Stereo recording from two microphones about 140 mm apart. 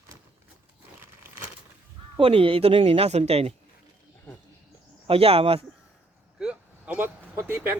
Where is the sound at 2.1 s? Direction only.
40° right (ahead or behind).